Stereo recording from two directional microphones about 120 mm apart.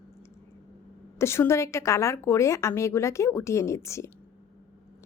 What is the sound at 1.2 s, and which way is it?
A woman's voice, 20° left (ahead or behind).